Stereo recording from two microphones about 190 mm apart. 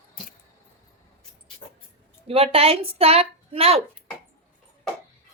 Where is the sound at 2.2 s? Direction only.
30° right (ahead or behind).